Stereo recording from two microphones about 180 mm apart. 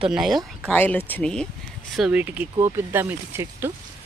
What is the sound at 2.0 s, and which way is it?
Speech, 5° right (ahead or behind).